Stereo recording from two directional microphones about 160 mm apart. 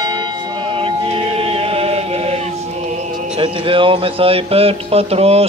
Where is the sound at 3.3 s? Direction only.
35° right (ahead or behind).